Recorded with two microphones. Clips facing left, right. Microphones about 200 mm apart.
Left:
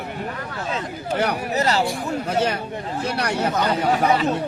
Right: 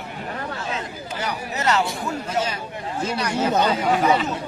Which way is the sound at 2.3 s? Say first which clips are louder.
Left 6 dB; 65° left (ahead or behind).